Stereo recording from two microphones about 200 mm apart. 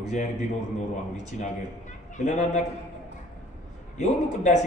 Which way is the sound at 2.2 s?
35° left (ahead or behind).